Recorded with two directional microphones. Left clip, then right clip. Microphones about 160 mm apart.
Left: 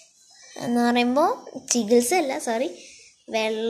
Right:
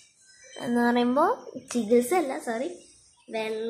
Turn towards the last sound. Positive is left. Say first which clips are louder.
# left 6 dB
turn(degrees=40)  # may be behind; listen again after turning